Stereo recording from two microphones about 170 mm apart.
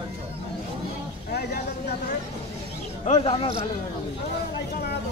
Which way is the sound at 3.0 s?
35° left (ahead or behind).